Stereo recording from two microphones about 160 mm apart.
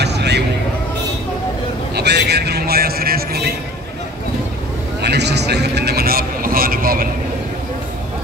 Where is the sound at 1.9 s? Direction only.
90° right; by 3.5 s 75° right (ahead or behind).